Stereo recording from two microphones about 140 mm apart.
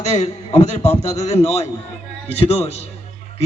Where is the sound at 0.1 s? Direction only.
50° left (ahead or behind).